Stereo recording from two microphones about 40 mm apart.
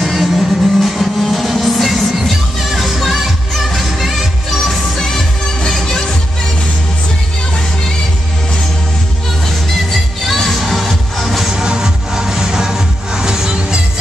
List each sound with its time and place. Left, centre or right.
0.0 s music: centre
4.6 s music: centre
10.2 s music: centre
11.5 s music: centre